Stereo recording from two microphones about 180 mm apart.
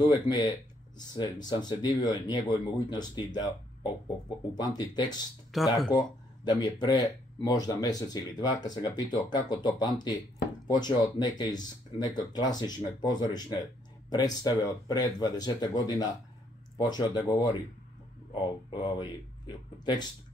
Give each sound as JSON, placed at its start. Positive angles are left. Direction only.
{"t": 0.0, "sound": "speech", "side_deg": 25}
{"t": 5.5, "sound": "speech", "side_deg": 0}
{"t": 5.9, "sound": "speech", "side_deg": 25}